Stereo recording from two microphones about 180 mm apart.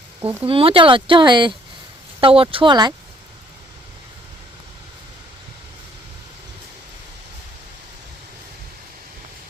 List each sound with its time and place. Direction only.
0.4 s speech: 30° right (ahead or behind)